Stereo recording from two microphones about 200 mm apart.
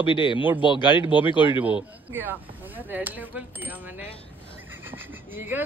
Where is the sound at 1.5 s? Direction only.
5° right (ahead or behind).